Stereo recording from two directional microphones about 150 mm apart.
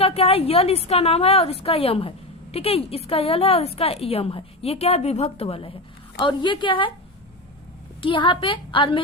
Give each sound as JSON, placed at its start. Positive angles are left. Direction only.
{"t": 0.0, "sound": "a woman's voice", "side_deg": 40}
{"t": 8.0, "sound": "a woman's voice", "side_deg": 35}